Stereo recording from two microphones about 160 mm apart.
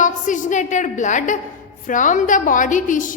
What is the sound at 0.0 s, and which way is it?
A woman's voice, 50° left (ahead or behind).